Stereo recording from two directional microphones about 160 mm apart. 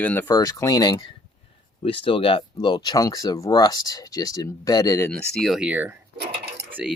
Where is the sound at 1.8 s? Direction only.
35° left (ahead or behind).